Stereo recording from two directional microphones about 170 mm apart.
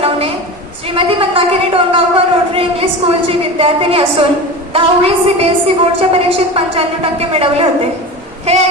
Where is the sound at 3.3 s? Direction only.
35° right (ahead or behind).